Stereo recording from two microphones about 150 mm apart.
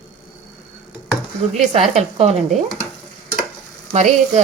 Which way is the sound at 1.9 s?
45° right (ahead or behind).